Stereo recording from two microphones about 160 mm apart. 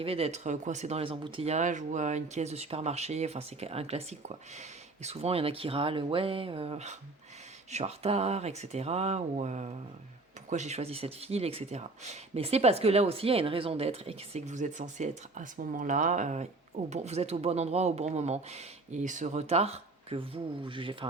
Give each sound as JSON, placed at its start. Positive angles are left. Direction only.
{"t": 0.0, "sound": "speech", "side_deg": -40}